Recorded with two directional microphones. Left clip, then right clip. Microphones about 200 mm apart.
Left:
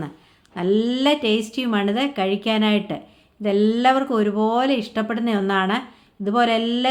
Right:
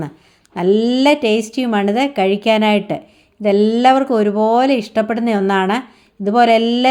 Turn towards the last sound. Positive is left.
turn(degrees=-35)  # may be behind; listen again after turning